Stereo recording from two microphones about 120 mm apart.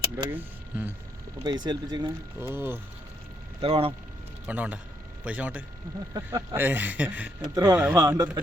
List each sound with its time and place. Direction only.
0.3 s speech: 15° right (ahead or behind)
1.5 s speech: 35° right (ahead or behind)
2.4 s speech: 20° right (ahead or behind)
3.6 s speech: 50° right (ahead or behind)
4.4 s speech: 10° right (ahead or behind)
6.1 s speech: 20° right (ahead or behind)
7.4 s speech: 30° right (ahead or behind)